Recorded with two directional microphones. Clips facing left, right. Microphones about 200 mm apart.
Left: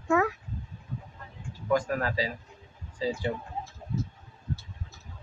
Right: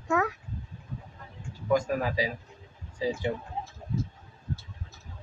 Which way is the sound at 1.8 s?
15° right (ahead or behind).